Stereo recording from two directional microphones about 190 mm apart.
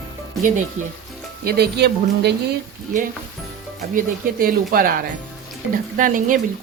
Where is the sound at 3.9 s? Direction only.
45° right (ahead or behind).